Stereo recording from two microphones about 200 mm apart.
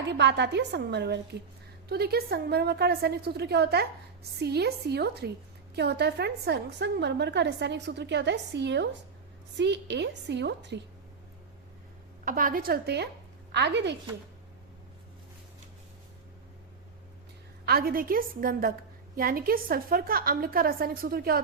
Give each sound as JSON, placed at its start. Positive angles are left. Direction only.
{"t": 0.1, "sound": "a woman's voice", "side_deg": -60}
{"t": 12.2, "sound": "a woman's voice", "side_deg": -45}
{"t": 17.7, "sound": "a woman's voice", "side_deg": -50}